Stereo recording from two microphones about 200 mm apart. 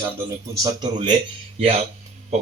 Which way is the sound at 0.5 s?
20° right (ahead or behind).